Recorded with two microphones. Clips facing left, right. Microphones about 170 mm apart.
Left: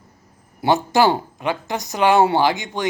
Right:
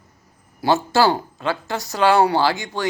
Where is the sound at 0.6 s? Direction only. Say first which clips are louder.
Left 1 dB; 20° left (ahead or behind).